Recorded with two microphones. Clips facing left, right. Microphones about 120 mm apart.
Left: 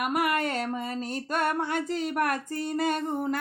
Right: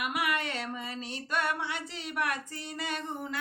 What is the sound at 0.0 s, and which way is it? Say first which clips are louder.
A woman's voice: left 5 dB; 45° left (ahead or behind).